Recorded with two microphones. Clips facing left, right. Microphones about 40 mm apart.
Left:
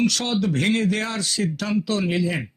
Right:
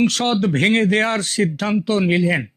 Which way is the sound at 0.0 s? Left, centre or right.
Right.